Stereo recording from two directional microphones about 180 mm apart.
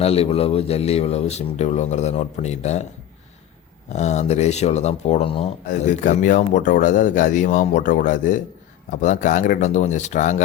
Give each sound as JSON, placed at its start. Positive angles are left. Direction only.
{"t": 0.0, "sound": "speech", "side_deg": 35}
{"t": 3.8, "sound": "speech", "side_deg": 40}
{"t": 5.6, "sound": "speech", "side_deg": 45}